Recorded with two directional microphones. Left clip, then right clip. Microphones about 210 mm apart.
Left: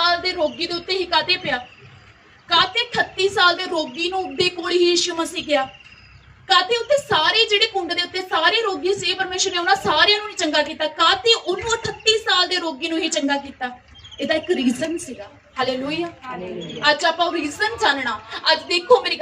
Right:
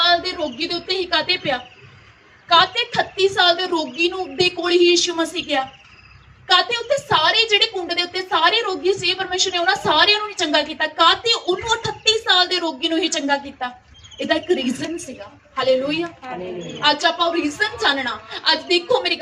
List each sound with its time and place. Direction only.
0.0 s a woman's voice: 25° right (ahead or behind)